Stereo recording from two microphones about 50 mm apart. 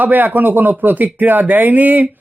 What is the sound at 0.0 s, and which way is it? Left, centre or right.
Speech, right.